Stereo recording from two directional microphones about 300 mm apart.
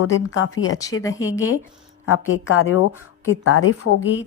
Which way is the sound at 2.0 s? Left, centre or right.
Left.